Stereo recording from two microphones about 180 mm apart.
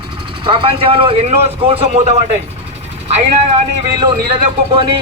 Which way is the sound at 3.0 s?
35° right (ahead or behind).